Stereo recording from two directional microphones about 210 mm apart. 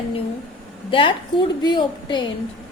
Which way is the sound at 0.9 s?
25° left (ahead or behind).